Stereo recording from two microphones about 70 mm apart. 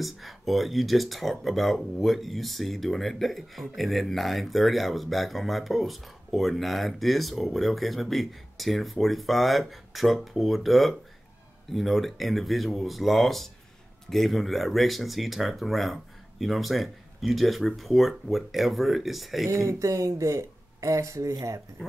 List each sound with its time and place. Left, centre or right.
0.0 s speech: centre
19.4 s speech: right